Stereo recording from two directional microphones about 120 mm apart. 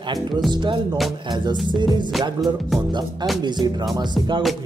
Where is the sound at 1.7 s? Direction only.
40° right (ahead or behind).